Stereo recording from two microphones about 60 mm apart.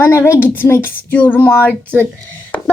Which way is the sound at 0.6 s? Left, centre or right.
Left.